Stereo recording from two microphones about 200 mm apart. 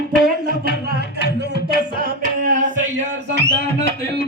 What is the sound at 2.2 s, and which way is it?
Singing, 40° right (ahead or behind).